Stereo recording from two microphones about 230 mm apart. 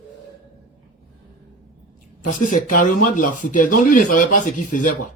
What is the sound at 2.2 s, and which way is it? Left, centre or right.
Speech, left.